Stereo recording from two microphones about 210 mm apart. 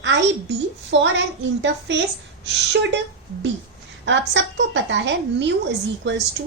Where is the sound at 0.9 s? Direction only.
60° right (ahead or behind).